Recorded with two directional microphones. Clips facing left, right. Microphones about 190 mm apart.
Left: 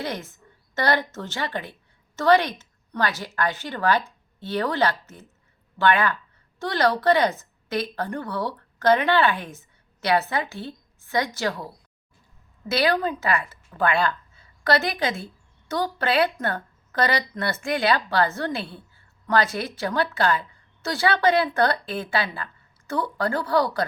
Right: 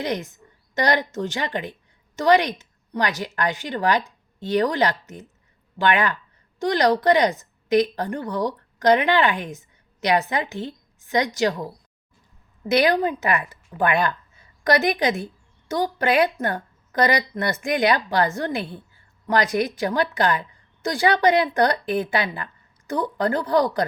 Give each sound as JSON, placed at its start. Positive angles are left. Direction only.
{"t": 0.0, "sound": "a woman's voice", "side_deg": -15}
{"t": 12.6, "sound": "a woman's voice", "side_deg": -20}